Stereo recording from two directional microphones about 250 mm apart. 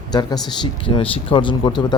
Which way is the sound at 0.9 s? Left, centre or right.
Centre.